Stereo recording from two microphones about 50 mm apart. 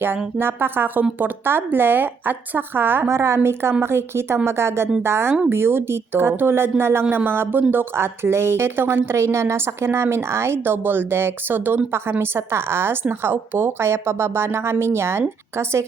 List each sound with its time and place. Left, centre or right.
0.3 s speech: right
3.1 s speech: right
7.9 s speech: right
9.1 s speech: right